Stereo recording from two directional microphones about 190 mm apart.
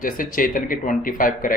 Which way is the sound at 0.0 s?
45° left (ahead or behind).